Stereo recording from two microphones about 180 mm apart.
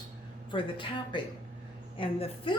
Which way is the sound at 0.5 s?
30° left (ahead or behind).